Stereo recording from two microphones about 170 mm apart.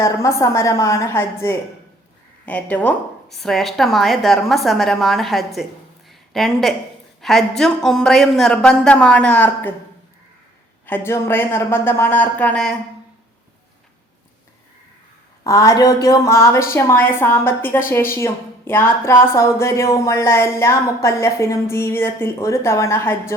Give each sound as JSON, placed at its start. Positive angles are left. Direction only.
{"t": 0.0, "sound": "a woman's voice", "side_deg": 15}
{"t": 6.1, "sound": "a sound", "side_deg": 0}
{"t": 7.2, "sound": "a woman's voice", "side_deg": 0}
{"t": 10.8, "sound": "a woman's voice", "side_deg": 15}
{"t": 15.4, "sound": "a woman's voice", "side_deg": 20}